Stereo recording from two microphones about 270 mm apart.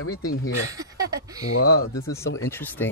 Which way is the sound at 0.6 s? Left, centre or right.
Centre.